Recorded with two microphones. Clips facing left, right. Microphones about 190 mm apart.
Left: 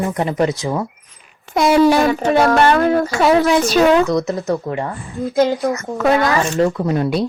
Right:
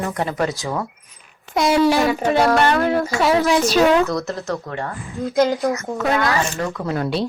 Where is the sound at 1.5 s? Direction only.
55° left (ahead or behind).